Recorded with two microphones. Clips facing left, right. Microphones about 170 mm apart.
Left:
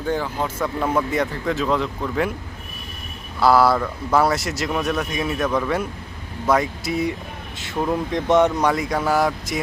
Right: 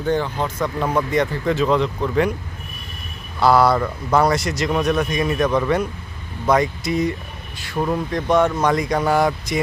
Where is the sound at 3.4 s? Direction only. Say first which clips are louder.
Right 1 dB; centre (ahead or behind).